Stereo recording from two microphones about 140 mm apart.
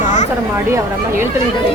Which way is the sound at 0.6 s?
20° right (ahead or behind).